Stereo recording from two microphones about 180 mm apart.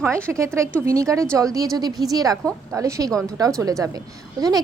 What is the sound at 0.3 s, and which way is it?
A woman's voice, 15° right (ahead or behind).